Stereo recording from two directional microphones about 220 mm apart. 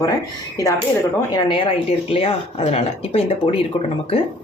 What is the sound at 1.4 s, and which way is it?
Speech, 20° left (ahead or behind).